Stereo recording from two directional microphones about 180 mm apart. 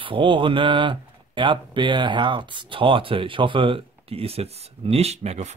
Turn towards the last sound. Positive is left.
turn(degrees=-35)  # may be behind; listen again after turning